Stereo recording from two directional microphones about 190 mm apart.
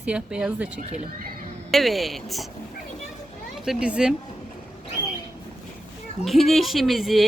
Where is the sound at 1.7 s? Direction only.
Centre (ahead or behind).